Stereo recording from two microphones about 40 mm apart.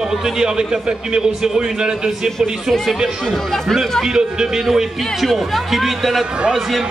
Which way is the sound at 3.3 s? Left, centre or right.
Centre.